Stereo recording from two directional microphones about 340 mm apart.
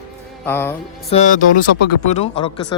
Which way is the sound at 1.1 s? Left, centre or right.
Left.